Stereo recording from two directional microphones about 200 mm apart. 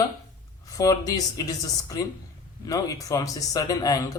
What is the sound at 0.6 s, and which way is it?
Speech, 15° left (ahead or behind).